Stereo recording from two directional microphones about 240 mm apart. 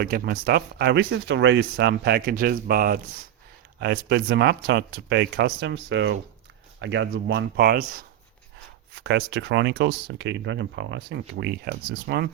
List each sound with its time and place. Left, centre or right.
0.0 s speech: right
9.0 s speech: right